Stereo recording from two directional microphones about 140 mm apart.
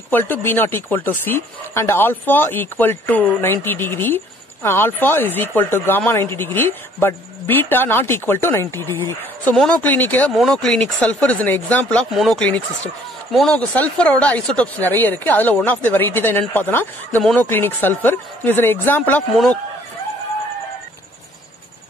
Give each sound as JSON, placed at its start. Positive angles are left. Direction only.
{"t": 0.1, "sound": "speech", "side_deg": 15}
{"t": 10.3, "sound": "speech", "side_deg": 0}